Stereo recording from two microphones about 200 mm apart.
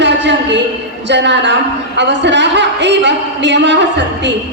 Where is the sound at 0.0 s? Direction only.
60° right (ahead or behind).